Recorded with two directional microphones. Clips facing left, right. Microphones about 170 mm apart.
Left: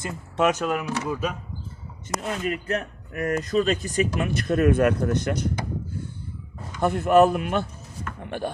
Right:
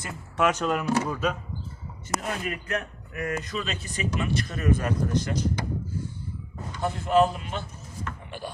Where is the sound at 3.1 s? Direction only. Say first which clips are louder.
Left 7 dB; 45° left (ahead or behind); by 5.4 s 60° left (ahead or behind).